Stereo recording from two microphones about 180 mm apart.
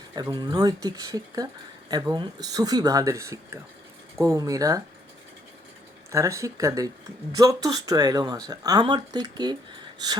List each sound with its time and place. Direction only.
0.1 s speech: 25° right (ahead or behind)
6.1 s speech: 15° right (ahead or behind)